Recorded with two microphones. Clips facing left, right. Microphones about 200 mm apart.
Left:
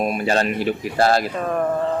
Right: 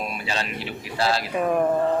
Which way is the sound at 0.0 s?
50° left (ahead or behind).